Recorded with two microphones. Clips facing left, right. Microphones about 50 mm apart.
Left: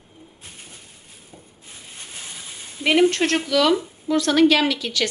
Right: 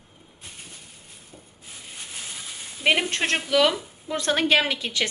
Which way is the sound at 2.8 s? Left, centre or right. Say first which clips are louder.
Left 5 dB; centre.